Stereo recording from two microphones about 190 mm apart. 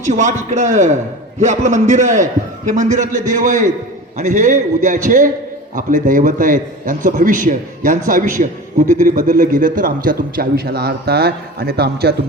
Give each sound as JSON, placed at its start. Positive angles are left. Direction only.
{"t": 0.0, "sound": "a man's voice", "side_deg": -40}